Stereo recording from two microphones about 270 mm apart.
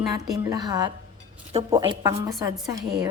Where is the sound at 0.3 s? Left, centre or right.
Centre.